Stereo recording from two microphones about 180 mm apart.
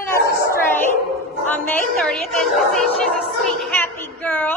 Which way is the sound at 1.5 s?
5° left (ahead or behind).